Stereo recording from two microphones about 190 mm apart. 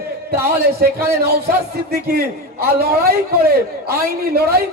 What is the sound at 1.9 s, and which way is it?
A man's voice, 55° right (ahead or behind).